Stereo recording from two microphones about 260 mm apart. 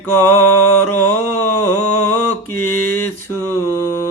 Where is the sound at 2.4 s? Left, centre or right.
Left.